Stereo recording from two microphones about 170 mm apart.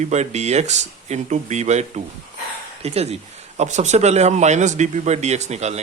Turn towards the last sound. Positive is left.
turn(degrees=-40)  # may be behind; listen again after turning